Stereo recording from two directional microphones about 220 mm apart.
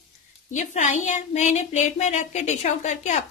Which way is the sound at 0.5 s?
35° left (ahead or behind).